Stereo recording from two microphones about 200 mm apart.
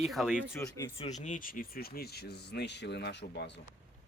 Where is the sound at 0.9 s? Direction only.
35° left (ahead or behind); by 3.6 s 60° left (ahead or behind).